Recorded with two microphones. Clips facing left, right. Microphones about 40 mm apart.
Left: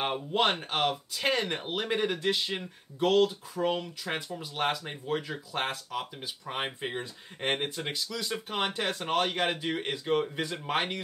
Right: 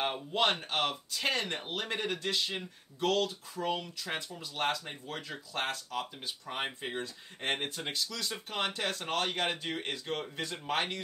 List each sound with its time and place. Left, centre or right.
0.0 s speech: centre